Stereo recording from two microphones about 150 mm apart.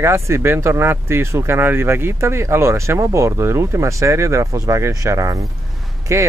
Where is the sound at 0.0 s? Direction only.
15° right (ahead or behind).